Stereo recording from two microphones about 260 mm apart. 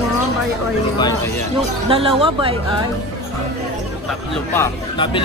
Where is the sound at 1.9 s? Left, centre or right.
Right.